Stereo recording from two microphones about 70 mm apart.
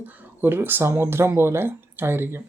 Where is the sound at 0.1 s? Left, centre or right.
Right.